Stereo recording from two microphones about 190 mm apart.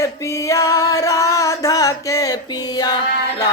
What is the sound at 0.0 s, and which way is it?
Music, 15° left (ahead or behind).